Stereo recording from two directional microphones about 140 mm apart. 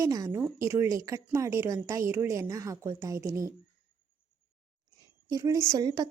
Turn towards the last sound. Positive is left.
turn(degrees=-25)  # may be behind; listen again after turning